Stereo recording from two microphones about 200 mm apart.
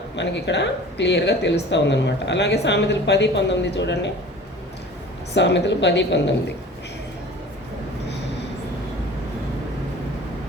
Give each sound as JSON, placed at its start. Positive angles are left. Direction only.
{"t": 0.2, "sound": "speech", "side_deg": 60}
{"t": 5.3, "sound": "speech", "side_deg": 60}